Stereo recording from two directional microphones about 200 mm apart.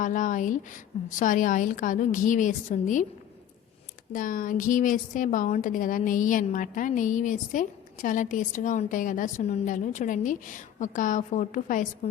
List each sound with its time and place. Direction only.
0.0 s a woman's voice: 40° left (ahead or behind)
4.1 s a woman's voice: 45° left (ahead or behind)